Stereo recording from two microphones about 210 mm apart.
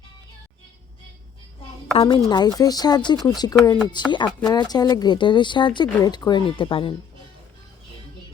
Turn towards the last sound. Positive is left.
turn(degrees=25)  # may be behind; listen again after turning